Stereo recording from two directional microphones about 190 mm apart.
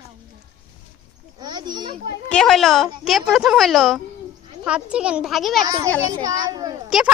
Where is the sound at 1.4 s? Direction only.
20° right (ahead or behind).